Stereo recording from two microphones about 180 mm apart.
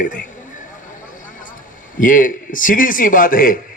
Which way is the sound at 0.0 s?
45° left (ahead or behind).